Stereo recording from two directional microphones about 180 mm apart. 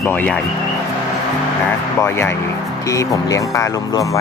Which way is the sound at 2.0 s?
15° left (ahead or behind).